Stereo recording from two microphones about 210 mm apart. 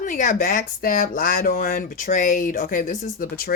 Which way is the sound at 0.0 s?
40° left (ahead or behind).